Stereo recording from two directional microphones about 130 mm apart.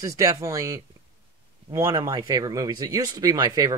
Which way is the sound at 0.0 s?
25° right (ahead or behind).